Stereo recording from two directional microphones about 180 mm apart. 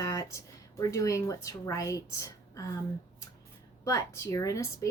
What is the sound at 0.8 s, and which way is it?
Speech, 20° left (ahead or behind).